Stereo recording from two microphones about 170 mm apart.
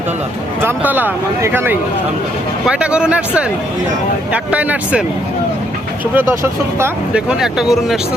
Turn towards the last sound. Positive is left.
turn(degrees=0)  # may be behind; listen again after turning